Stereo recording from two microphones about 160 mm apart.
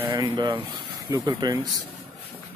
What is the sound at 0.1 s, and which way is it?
Speech, 30° right (ahead or behind).